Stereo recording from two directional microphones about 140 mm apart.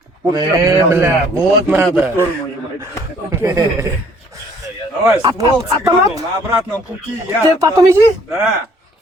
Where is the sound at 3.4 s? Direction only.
25° right (ahead or behind).